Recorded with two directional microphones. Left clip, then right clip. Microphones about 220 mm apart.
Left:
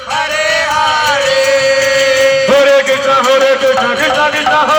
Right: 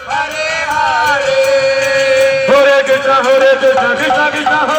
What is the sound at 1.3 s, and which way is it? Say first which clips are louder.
Chant: left 1 dB; 45° left (ahead or behind).